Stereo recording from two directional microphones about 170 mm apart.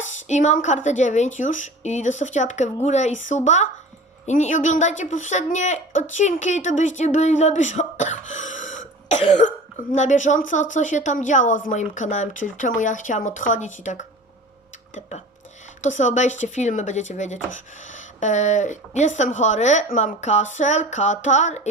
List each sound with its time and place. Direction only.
0.0 s a woman's voice: 45° left (ahead or behind)
9.0 s cough: 40° left (ahead or behind)
9.9 s a woman's voice: 45° left (ahead or behind)
15.8 s a woman's voice: 45° left (ahead or behind)